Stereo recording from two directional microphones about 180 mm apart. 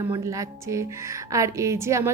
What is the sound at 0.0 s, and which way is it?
A woman's voice, 20° right (ahead or behind).